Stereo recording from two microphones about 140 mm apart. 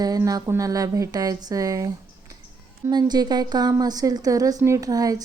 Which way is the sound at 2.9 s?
30° right (ahead or behind).